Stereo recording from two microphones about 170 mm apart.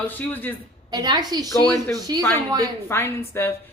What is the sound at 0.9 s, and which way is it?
Speech, 25° right (ahead or behind).